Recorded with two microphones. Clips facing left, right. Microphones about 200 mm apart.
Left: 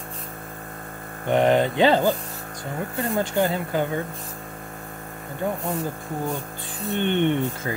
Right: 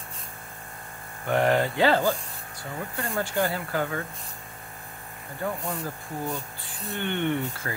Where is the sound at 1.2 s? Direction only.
20° left (ahead or behind).